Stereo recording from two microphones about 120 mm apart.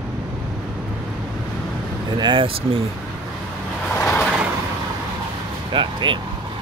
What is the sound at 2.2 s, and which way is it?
Speech, 45° right (ahead or behind).